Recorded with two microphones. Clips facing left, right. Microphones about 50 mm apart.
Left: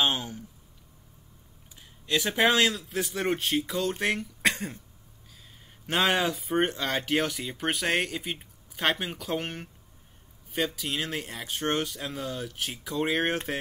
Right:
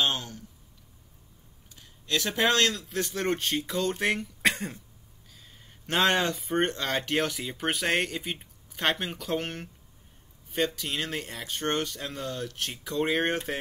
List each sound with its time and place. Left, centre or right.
0.0 s speech: centre
1.8 s a sound: centre
2.4 s speech: centre